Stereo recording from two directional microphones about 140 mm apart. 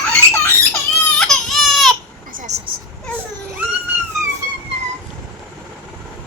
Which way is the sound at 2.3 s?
55° right (ahead or behind).